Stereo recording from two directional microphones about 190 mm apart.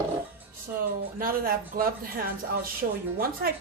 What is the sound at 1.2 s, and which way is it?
A woman's voice, 50° right (ahead or behind).